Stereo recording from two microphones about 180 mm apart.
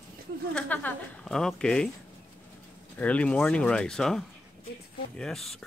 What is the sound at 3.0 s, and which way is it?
Speech, 5° left (ahead or behind).